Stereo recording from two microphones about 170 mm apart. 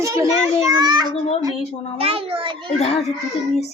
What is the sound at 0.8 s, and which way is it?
A child's voice, 25° right (ahead or behind).